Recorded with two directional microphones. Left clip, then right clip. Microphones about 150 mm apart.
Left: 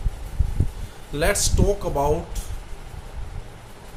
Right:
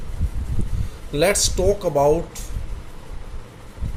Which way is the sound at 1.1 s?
25° right (ahead or behind).